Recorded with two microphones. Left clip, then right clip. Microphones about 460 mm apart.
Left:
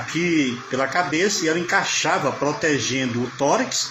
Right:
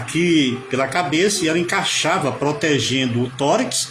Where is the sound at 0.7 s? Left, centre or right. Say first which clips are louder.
Right 2 dB; right.